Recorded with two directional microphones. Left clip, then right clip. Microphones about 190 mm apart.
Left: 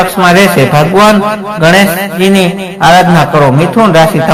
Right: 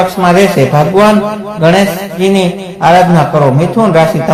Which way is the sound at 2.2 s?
20° left (ahead or behind).